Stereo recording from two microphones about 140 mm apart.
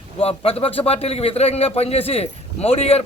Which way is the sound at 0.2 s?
45° left (ahead or behind).